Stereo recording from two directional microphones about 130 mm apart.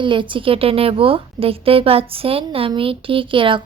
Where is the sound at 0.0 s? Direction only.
40° right (ahead or behind).